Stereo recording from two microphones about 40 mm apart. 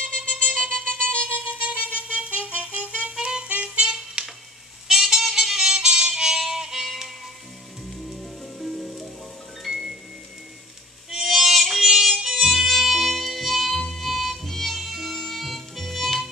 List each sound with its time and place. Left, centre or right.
0.0 s music: left
1.5 s music: right; by 7.1 s centre
8.1 s music: centre
11.1 s music: centre